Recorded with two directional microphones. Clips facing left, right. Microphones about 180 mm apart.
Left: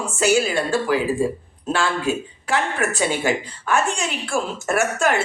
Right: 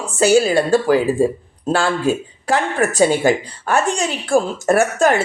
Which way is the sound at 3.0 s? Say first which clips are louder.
Right 9 dB; 40° right (ahead or behind).